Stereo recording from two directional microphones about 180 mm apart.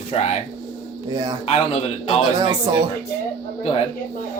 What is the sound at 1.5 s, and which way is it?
Speech, 35° left (ahead or behind).